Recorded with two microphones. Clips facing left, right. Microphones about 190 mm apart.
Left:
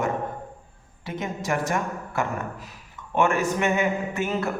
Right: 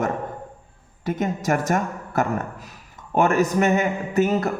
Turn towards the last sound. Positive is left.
turn(degrees=-40)  # may be behind; listen again after turning